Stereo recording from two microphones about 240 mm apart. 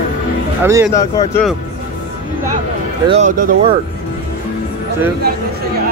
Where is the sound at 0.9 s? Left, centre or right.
Centre.